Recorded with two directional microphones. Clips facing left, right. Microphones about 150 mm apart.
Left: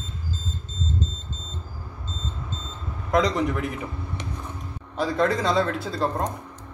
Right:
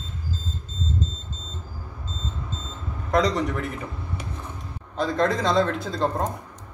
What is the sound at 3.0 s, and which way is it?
Speech, centre (ahead or behind).